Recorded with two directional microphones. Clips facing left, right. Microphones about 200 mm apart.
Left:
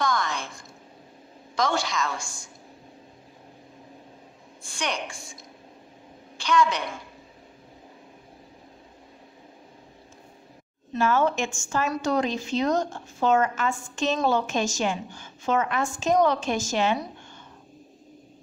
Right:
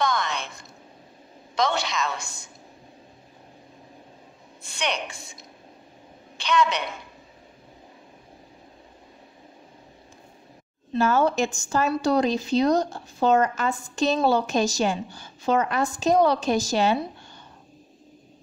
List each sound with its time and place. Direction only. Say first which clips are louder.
0.0 s a sound: right 1 dB; 20° right (ahead or behind)
1.5 s a sound: right 1 dB; 20° right (ahead or behind)
1.9 s a woman's voice: right 1 dB; 20° right (ahead or behind)
4.6 s a woman's voice: right 2 dB; 20° right (ahead or behind)
6.3 s a woman's voice: even; 20° right (ahead or behind)
10.9 s speech: right 2 dB; 35° right (ahead or behind)